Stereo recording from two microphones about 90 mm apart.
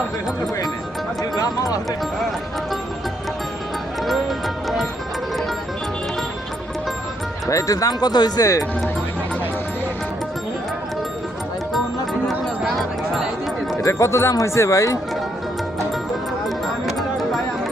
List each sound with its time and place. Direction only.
1.2 s speech: 45° left (ahead or behind)
4.0 s music: centre (ahead or behind)
7.4 s speech: 40° left (ahead or behind)
12.6 s music: centre (ahead or behind)
13.8 s speech: 30° left (ahead or behind)
16.8 s music: centre (ahead or behind)